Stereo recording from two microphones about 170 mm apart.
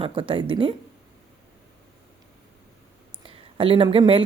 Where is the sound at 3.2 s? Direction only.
30° right (ahead or behind).